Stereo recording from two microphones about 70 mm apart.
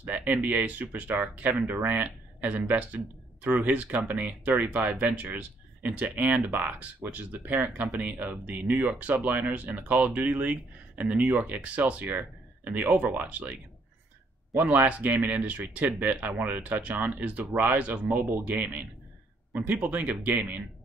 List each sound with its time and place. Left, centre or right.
0.0 s speech: right